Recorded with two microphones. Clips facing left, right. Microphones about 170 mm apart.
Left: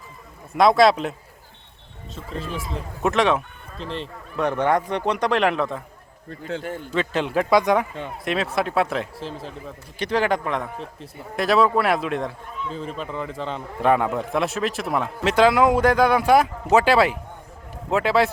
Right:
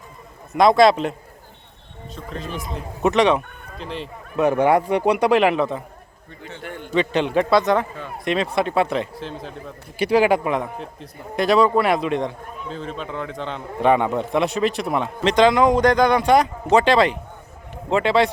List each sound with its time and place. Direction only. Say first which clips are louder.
0.5 s a man's voice: right 2 dB; centre (ahead or behind)
3.0 s a man's voice: right 3 dB; centre (ahead or behind)
6.6 s a man's voice: left 2 dB; 40° left (ahead or behind)
6.9 s a man's voice: right 4 dB; centre (ahead or behind)